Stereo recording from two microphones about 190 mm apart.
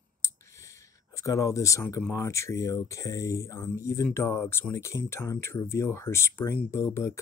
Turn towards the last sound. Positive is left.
turn(degrees=15)  # may be behind; listen again after turning